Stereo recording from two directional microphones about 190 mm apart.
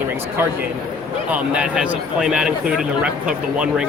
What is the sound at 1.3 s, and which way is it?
Speech, 5° right (ahead or behind).